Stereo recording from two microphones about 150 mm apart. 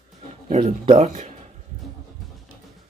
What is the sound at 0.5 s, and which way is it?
Speech, 45° right (ahead or behind).